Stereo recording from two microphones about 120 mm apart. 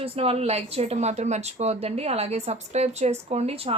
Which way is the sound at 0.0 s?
55° right (ahead or behind).